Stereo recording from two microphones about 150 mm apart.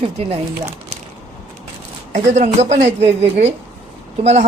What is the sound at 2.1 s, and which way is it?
Speech, 50° right (ahead or behind).